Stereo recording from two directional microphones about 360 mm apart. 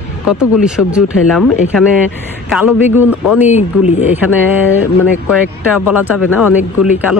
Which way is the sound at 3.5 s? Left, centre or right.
Centre.